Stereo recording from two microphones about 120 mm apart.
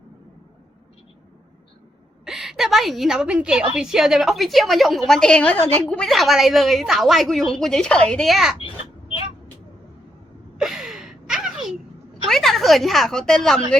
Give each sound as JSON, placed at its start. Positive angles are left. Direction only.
{"t": 2.2, "sound": "a woman's voice", "side_deg": -5}
{"t": 6.1, "sound": "a woman's voice", "side_deg": 0}
{"t": 8.5, "sound": "vehicle", "side_deg": 45}
{"t": 10.6, "sound": "gasp", "side_deg": -5}
{"t": 12.3, "sound": "a woman's voice", "side_deg": 0}